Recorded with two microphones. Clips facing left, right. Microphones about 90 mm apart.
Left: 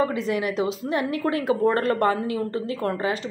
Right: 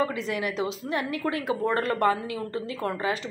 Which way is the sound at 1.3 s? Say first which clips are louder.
Left 5 dB; 40° left (ahead or behind).